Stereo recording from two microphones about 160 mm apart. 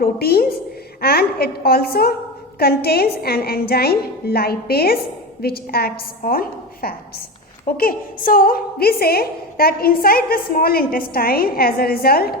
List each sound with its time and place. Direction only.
0.0 s a woman's voice: 75° left (ahead or behind)